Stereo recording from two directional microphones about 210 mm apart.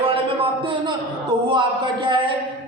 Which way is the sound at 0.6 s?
25° right (ahead or behind).